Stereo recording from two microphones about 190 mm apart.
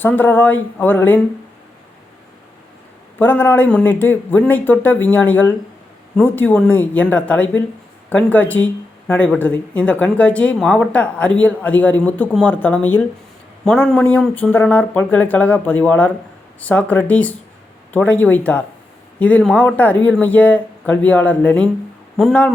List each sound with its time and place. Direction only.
0.0 s speech: 10° left (ahead or behind)
3.2 s speech: 10° left (ahead or behind)